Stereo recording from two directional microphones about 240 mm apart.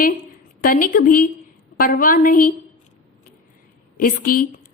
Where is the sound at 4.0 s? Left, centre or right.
Left.